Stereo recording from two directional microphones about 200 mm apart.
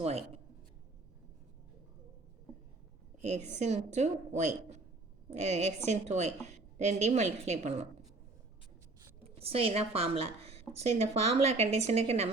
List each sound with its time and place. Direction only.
0.0 s speech: 30° right (ahead or behind)
3.2 s a woman's voice: 35° right (ahead or behind)
9.2 s a woman's voice: 30° right (ahead or behind)